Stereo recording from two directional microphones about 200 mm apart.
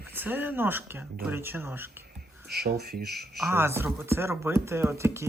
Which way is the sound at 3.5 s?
10° right (ahead or behind).